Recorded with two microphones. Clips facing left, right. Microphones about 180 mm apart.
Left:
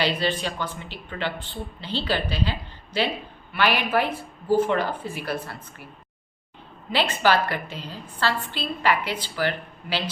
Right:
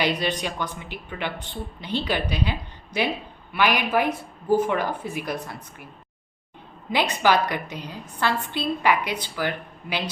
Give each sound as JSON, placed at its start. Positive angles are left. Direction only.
{"t": 0.2, "sound": "a woman's voice", "side_deg": -15}
{"t": 6.9, "sound": "a woman's voice", "side_deg": -15}